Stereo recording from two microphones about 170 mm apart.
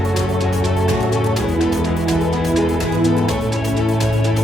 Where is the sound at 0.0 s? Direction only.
Centre (ahead or behind).